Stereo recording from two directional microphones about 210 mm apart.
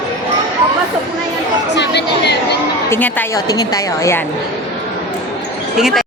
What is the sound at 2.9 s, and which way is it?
A woman's voice, 10° left (ahead or behind).